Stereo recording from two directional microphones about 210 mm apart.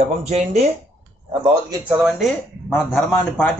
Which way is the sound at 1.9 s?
5° right (ahead or behind).